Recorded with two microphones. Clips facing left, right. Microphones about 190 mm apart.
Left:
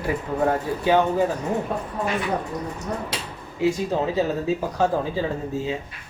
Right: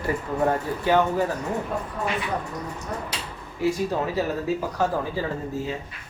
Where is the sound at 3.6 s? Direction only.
20° left (ahead or behind).